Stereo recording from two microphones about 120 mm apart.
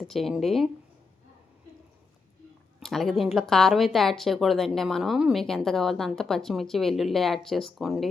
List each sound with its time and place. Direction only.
0.0 s speech: centre (ahead or behind)
2.8 s speech: centre (ahead or behind)